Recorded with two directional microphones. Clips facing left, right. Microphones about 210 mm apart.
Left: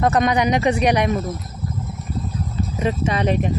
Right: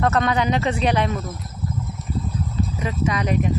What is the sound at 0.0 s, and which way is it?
Speech, 15° left (ahead or behind).